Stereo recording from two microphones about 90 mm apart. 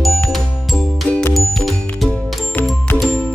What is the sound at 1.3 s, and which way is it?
Music, centre (ahead or behind).